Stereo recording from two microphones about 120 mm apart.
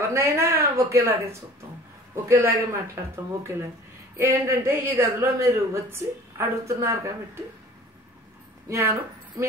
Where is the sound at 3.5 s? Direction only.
25° right (ahead or behind).